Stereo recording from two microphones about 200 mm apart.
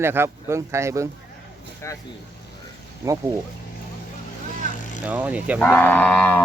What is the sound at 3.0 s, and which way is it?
Speech, 15° right (ahead or behind).